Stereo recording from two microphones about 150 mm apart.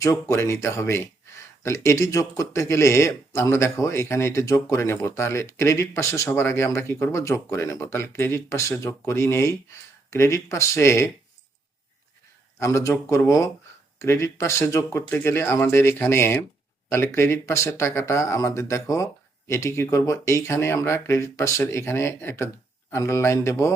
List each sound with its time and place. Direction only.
0.0 s speech: 20° left (ahead or behind)
12.5 s speech: 20° left (ahead or behind)